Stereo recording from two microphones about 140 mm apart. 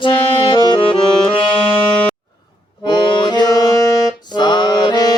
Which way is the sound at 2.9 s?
35° left (ahead or behind).